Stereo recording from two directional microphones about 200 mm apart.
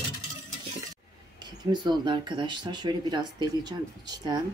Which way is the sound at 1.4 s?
20° right (ahead or behind).